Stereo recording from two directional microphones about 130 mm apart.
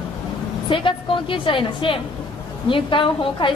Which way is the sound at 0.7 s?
40° left (ahead or behind).